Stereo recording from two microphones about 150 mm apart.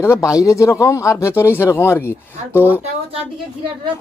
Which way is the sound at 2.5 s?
10° right (ahead or behind).